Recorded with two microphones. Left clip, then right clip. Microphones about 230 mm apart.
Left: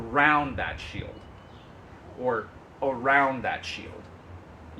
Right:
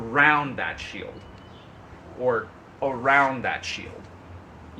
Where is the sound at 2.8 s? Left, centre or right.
Centre.